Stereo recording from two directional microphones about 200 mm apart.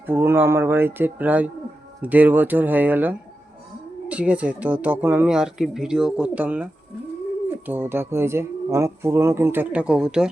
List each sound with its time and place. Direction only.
0.1 s speech: 10° right (ahead or behind)
7.7 s speech: 10° right (ahead or behind)